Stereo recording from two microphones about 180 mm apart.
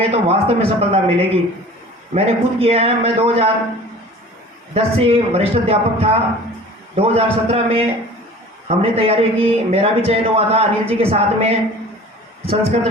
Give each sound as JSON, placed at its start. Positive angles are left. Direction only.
{"t": 0.0, "sound": "a man's voice", "side_deg": -35}
{"t": 4.7, "sound": "a man's voice", "side_deg": -30}